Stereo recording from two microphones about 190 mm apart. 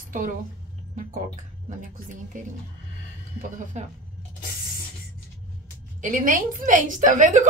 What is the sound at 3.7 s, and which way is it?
Speech, 35° right (ahead or behind).